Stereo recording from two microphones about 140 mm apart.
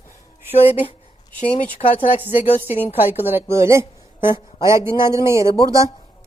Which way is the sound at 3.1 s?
15° right (ahead or behind).